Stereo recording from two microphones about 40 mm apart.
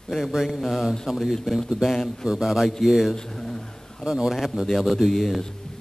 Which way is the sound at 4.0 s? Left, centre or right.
Right.